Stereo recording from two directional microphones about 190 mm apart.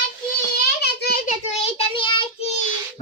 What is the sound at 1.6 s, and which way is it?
Child singing, 25° left (ahead or behind).